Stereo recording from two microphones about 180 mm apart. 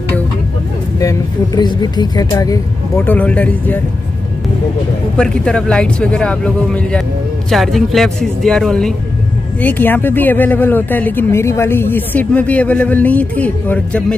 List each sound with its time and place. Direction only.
0.9 s speech: 20° left (ahead or behind)
3.1 s speech: 10° left (ahead or behind)
5.1 s speech: 5° left (ahead or behind)